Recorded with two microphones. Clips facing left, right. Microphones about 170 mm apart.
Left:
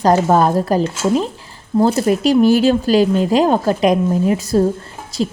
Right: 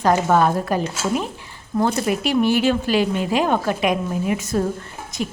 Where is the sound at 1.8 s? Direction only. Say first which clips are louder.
Left 6 dB; 35° left (ahead or behind).